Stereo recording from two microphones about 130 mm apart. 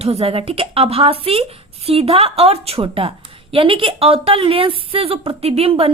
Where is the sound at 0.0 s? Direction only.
50° right (ahead or behind).